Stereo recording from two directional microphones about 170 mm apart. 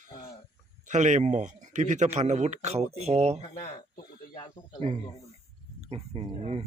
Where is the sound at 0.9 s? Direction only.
45° right (ahead or behind).